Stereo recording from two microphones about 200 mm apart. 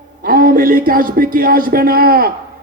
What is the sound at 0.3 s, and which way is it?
A man's voice, 45° right (ahead or behind).